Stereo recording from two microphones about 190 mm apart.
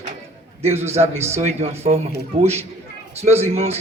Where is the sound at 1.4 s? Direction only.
35° right (ahead or behind).